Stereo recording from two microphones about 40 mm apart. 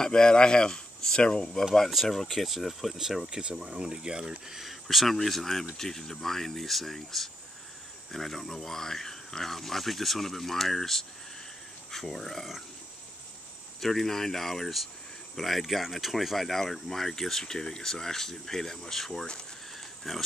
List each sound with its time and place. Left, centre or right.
0.0 s speech: centre
2.3 s speech: centre
3.3 s speech: centre
4.5 s speech: centre
13.7 s speech: centre